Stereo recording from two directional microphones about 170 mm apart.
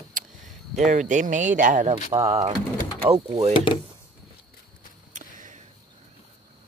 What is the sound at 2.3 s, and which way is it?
Speech, 40° right (ahead or behind).